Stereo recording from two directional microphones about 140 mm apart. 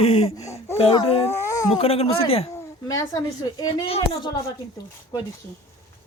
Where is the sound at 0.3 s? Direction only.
20° left (ahead or behind).